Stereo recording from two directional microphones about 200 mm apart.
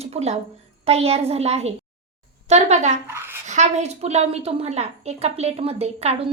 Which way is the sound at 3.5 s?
35° right (ahead or behind).